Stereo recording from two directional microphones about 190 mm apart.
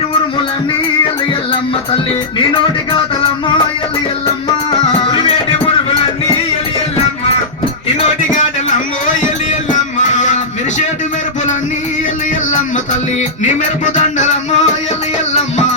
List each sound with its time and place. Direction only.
5.1 s music: 30° left (ahead or behind)
10.0 s a sound: 40° left (ahead or behind)
12.5 s music: 40° left (ahead or behind)